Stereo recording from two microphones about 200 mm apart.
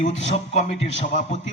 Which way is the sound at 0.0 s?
30° left (ahead or behind).